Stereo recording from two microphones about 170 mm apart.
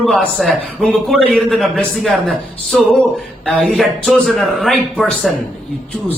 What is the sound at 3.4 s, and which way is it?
A man's voice, 5° left (ahead or behind).